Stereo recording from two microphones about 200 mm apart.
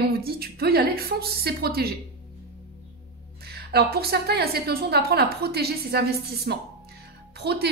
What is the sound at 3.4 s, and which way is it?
A woman's voice, 50° right (ahead or behind).